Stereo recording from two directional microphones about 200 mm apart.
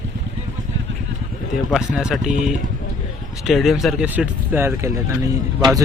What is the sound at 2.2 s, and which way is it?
Speech, 40° right (ahead or behind).